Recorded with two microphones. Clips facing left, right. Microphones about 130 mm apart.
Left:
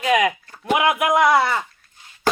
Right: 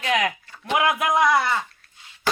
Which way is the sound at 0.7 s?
20° left (ahead or behind).